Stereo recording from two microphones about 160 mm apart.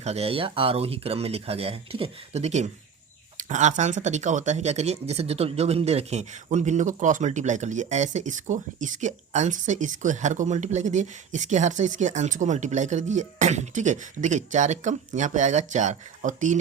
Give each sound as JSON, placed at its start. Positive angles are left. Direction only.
{"t": 0.0, "sound": "speech", "side_deg": -40}